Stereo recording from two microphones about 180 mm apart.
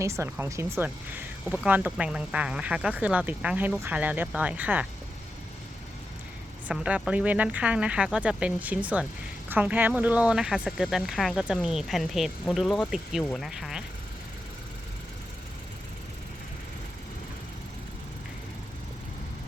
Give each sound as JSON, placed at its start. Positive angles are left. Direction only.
{"t": 0.0, "sound": "speech", "side_deg": -15}
{"t": 6.7, "sound": "speech", "side_deg": -5}